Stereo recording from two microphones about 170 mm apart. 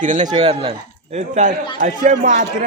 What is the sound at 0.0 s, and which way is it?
A man's voice, 50° right (ahead or behind).